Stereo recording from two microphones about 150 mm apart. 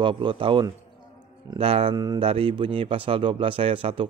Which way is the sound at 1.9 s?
25° right (ahead or behind).